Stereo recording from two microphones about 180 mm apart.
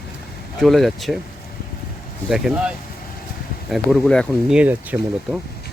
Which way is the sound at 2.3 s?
Centre (ahead or behind).